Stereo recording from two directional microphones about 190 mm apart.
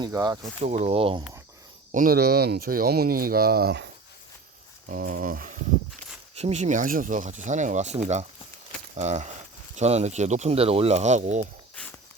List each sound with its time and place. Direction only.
0.0 s speech: 20° right (ahead or behind)
0.6 s speech: 35° right (ahead or behind)
1.9 s speech: 45° right (ahead or behind)
4.9 s speech: 45° right (ahead or behind)
11.7 s a sound: 5° left (ahead or behind)